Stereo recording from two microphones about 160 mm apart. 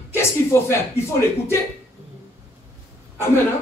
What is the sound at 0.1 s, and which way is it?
Speech, 15° left (ahead or behind).